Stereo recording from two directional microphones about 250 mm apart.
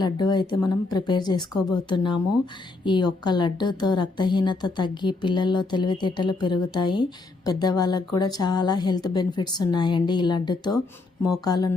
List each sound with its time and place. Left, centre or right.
0.0 s a woman's voice: centre